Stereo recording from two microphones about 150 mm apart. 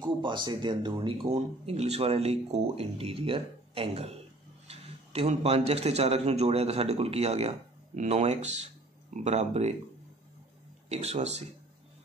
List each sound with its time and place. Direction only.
0.0 s speech: 30° right (ahead or behind)
10.9 s speech: 45° right (ahead or behind)